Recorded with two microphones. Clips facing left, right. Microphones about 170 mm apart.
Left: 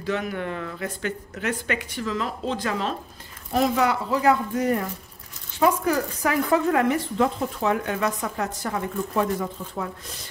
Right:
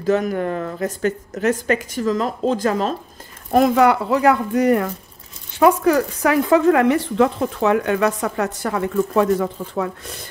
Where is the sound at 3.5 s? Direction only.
60° right (ahead or behind).